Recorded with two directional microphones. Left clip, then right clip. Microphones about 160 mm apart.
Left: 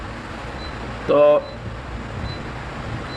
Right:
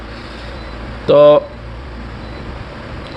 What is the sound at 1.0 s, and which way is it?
Speech, 55° right (ahead or behind).